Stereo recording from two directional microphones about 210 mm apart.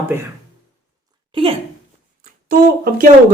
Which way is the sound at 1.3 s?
25° right (ahead or behind).